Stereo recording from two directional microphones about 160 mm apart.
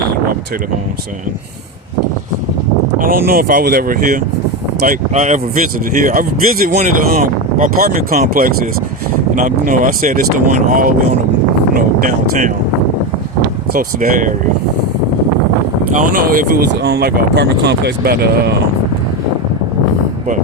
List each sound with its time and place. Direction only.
3.0 s speech: 65° right (ahead or behind)
9.3 s speech: 55° right (ahead or behind)
13.7 s speech: 60° right (ahead or behind)
16.0 s speech: 60° right (ahead or behind); by 18.5 s 75° right (ahead or behind)